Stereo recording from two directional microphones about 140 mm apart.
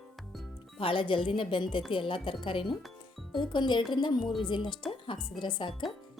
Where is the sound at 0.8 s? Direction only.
40° left (ahead or behind).